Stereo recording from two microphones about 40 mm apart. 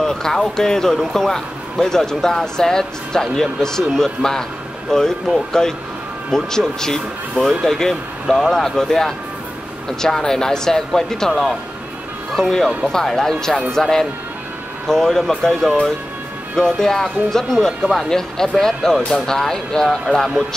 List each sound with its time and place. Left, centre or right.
0.0 s speech: centre